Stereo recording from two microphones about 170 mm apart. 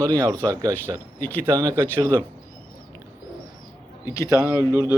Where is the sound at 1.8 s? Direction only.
10° left (ahead or behind).